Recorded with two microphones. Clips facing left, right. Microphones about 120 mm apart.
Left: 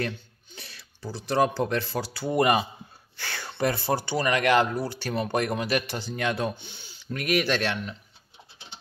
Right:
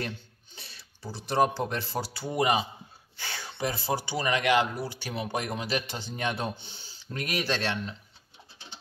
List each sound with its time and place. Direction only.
0.6 s speech: 25° right (ahead or behind)
2.3 s speech: 60° left (ahead or behind)
4.2 s speech: 20° right (ahead or behind)
5.3 s speech: 65° left (ahead or behind)
5.7 s speech: 25° right (ahead or behind)